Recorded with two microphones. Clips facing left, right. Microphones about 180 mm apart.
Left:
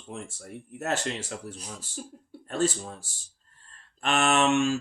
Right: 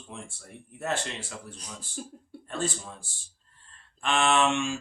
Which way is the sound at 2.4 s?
40° left (ahead or behind).